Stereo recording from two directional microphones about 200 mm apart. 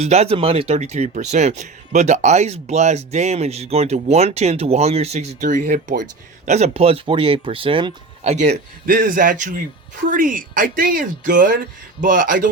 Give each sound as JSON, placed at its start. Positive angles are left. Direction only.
{"t": 0.0, "sound": "speech", "side_deg": -35}
{"t": 8.4, "sound": "speech", "side_deg": -45}